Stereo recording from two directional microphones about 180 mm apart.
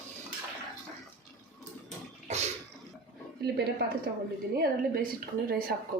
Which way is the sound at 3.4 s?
65° right (ahead or behind).